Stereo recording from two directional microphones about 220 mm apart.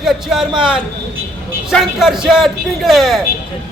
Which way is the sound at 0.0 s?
Centre (ahead or behind).